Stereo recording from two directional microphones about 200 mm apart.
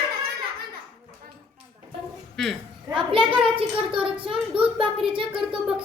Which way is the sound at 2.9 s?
25° right (ahead or behind).